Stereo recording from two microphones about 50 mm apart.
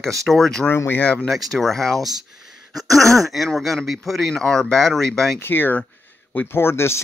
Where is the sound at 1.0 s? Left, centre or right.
Left.